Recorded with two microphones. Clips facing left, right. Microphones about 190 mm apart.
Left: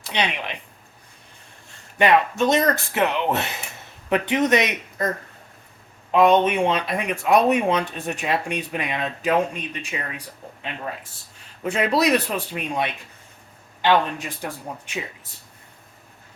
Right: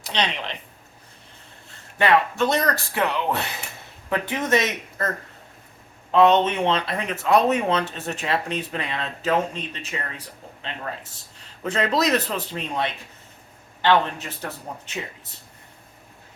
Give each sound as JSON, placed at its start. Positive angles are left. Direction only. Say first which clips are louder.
{"t": 0.1, "sound": "speech", "louder": "left 1 dB", "side_deg": 10}
{"t": 2.0, "sound": "speech", "louder": "left 1 dB", "side_deg": 15}